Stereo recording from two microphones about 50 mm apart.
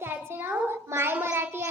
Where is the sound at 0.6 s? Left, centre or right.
Right.